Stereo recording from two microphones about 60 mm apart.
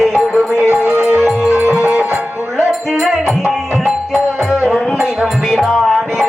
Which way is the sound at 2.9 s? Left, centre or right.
Centre.